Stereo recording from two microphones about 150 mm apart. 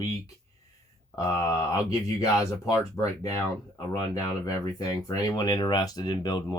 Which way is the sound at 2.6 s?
25° left (ahead or behind).